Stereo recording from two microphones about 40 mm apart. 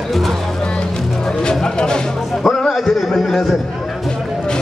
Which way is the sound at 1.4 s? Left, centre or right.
Centre.